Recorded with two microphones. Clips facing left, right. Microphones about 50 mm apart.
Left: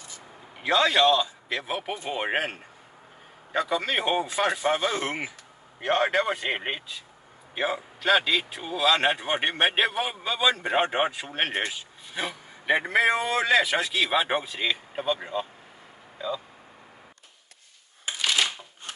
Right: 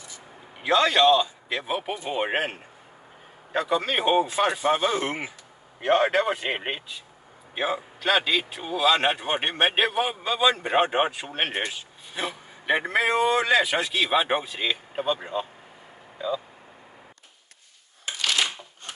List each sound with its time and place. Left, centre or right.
0.6 s a man's voice: centre
3.5 s speech: centre
3.8 s a man's voice: centre
18.0 s shuffling cards: centre